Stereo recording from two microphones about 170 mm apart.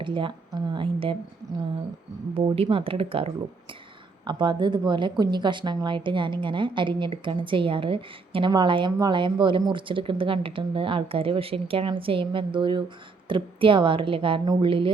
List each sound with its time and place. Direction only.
0.0 s a woman's voice: 30° right (ahead or behind)
2.3 s a woman's voice: 30° right (ahead or behind)